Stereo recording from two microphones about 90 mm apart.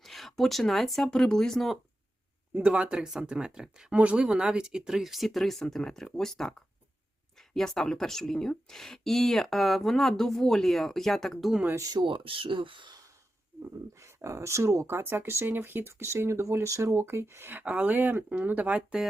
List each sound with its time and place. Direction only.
0.0 s speech: centre (ahead or behind)
2.6 s speech: 15° right (ahead or behind)
11.8 s speech: 45° right (ahead or behind)
12.0 s speech: 75° right (ahead or behind)
14.0 s speech: 35° right (ahead or behind); by 19.0 s 10° right (ahead or behind)